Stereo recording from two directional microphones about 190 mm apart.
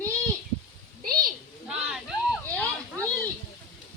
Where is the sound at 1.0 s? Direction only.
50° right (ahead or behind).